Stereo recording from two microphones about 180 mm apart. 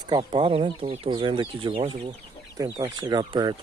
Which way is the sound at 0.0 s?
25° right (ahead or behind).